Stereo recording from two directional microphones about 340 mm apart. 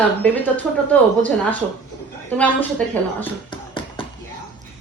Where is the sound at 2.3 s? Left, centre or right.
Centre.